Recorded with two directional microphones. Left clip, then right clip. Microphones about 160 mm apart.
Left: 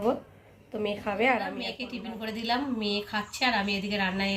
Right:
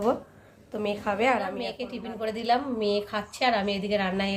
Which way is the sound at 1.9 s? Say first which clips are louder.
Right 4 dB; 90° right.